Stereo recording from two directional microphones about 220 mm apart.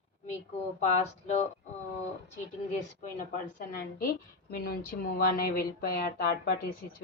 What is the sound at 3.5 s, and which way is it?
A woman's voice, 40° left (ahead or behind).